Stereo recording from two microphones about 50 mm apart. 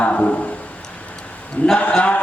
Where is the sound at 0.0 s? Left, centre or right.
Left.